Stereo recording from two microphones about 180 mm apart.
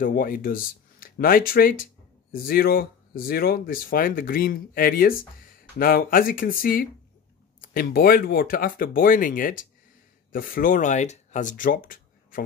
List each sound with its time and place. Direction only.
0.0 s speech: 50° left (ahead or behind)